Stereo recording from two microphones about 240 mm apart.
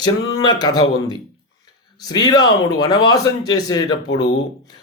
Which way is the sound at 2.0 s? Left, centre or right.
Centre.